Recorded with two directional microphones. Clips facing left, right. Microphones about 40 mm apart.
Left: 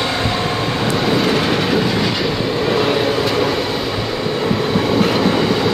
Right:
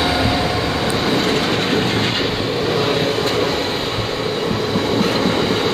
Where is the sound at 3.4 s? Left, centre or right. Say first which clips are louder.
Left 1 dB; right.